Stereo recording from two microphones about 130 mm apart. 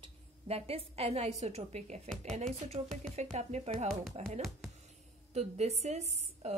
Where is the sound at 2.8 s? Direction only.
45° right (ahead or behind).